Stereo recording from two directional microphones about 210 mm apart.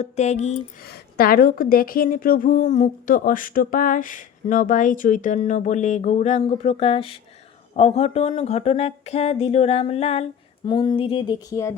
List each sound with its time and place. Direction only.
0.0 s a woman's voice: 35° left (ahead or behind)
0.8 s a woman's voice: 50° left (ahead or behind); by 7.2 s 25° left (ahead or behind)
7.8 s a sound: 30° left (ahead or behind)